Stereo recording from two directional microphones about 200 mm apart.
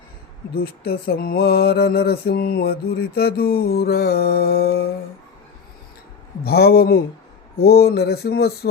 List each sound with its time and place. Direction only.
0.5 s mantra: 50° left (ahead or behind)
6.4 s mantra: 50° left (ahead or behind)